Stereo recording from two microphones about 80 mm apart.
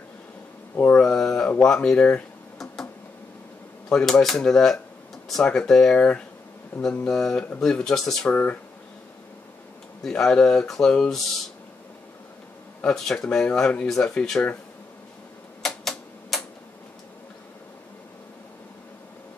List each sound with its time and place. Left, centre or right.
0.7 s mantra: left
1.0 s mantra: centre
1.6 s speech: centre
2.6 s a sound: centre
3.9 s speech: centre
8.3 s speech: left
10.0 s speech: centre
12.8 s speech: centre
15.6 s typewriter: centre